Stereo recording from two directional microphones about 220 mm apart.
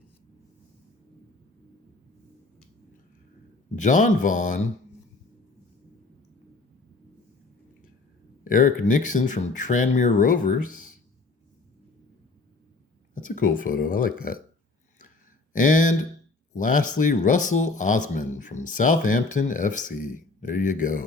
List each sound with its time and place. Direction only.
3.8 s speech: 35° left (ahead or behind)
8.4 s speech: 35° left (ahead or behind)
13.1 s speech: 35° left (ahead or behind)
15.5 s speech: 35° left (ahead or behind)